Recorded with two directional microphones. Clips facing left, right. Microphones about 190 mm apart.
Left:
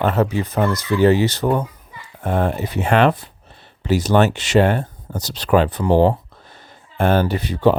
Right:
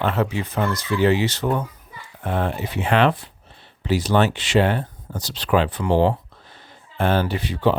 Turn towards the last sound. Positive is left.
turn(degrees=40)  # may be behind; listen again after turning